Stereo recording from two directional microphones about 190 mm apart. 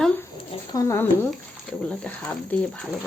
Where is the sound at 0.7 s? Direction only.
15° left (ahead or behind).